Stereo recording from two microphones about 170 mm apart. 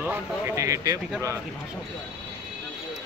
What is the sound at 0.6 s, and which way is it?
Speech, 20° right (ahead or behind).